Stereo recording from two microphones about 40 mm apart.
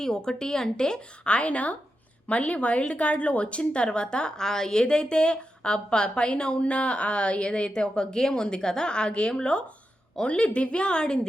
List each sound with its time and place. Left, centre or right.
0.0 s speech: centre
1.2 s a woman's voice: left